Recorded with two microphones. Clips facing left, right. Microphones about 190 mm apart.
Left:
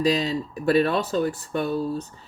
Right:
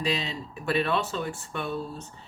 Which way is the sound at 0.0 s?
40° left (ahead or behind).